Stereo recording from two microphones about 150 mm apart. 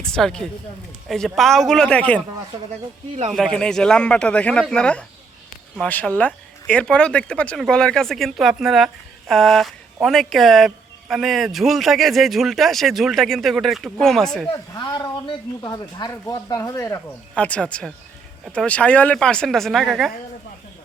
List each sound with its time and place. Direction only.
0.0 s speech: 5° left (ahead or behind)
3.3 s speech: 5° left (ahead or behind)
14.5 s speech: 20° left (ahead or behind); by 20.1 s centre (ahead or behind)